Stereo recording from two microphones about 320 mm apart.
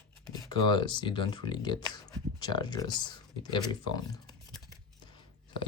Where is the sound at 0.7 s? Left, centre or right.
Centre.